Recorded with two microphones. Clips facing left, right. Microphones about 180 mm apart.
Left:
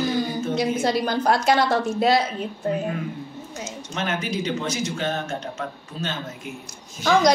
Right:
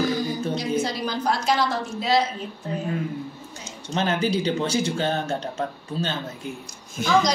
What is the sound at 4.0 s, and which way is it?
Speech, 30° right (ahead or behind).